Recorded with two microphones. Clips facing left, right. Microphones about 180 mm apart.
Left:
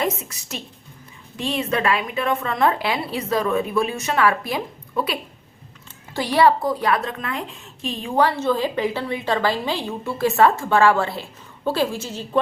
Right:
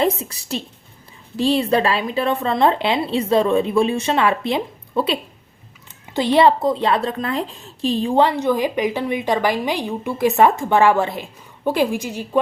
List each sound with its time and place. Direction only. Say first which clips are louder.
0.0 s a woman's voice: right 5 dB; 30° right (ahead or behind); by 12.4 s 10° right (ahead or behind)